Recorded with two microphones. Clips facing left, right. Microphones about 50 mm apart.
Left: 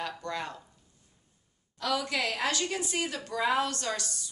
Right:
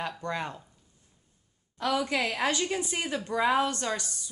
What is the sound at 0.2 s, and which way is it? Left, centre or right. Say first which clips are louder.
Speech: right 2 dB; right.